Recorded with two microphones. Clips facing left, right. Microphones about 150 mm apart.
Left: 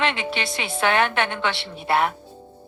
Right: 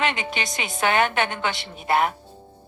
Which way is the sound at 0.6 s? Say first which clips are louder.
Even; centre (ahead or behind).